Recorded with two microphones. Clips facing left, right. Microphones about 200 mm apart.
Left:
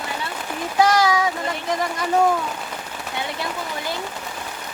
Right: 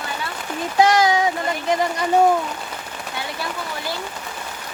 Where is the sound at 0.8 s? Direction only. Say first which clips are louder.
Right 1 dB; 25° right (ahead or behind).